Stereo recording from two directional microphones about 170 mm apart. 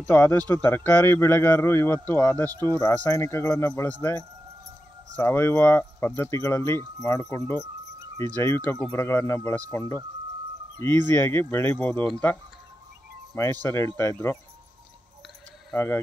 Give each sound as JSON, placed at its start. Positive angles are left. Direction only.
{"t": 0.0, "sound": "speech", "side_deg": 10}
{"t": 5.2, "sound": "speech", "side_deg": 15}
{"t": 7.5, "sound": "music", "side_deg": -20}
{"t": 8.4, "sound": "speech", "side_deg": 10}
{"t": 13.4, "sound": "speech", "side_deg": 15}
{"t": 15.7, "sound": "speech", "side_deg": 15}